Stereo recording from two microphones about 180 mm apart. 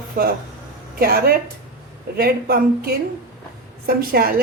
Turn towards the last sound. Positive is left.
turn(degrees=-55)  # may be behind; listen again after turning